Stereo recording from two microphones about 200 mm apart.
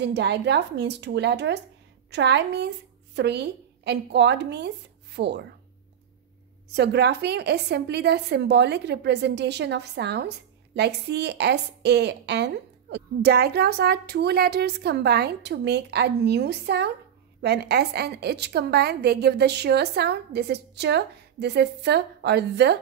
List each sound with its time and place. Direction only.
0.0 s a woman's voice: 60° right (ahead or behind)
6.7 s a woman's voice: 55° right (ahead or behind)